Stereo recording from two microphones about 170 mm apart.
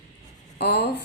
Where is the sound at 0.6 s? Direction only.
70° left (ahead or behind).